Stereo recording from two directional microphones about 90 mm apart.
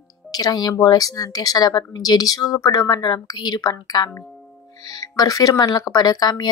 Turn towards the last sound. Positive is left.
turn(degrees=50)  # may be behind; listen again after turning